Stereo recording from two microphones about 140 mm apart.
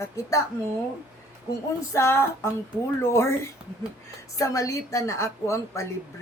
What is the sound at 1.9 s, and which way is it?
A woman's voice, 20° left (ahead or behind).